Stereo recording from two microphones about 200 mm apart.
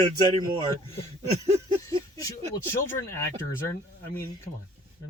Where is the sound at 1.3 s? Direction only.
35° right (ahead or behind).